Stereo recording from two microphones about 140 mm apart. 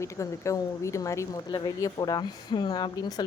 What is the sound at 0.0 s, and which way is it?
Speech, 20° left (ahead or behind).